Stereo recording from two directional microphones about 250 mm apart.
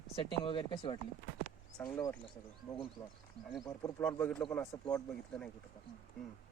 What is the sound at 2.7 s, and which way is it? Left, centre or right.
A man's voice, centre.